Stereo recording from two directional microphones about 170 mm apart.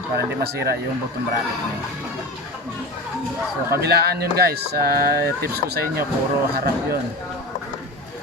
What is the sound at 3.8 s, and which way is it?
Speech, 70° right (ahead or behind).